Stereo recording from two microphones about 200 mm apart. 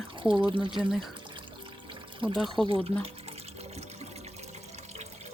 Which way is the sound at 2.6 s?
30° right (ahead or behind).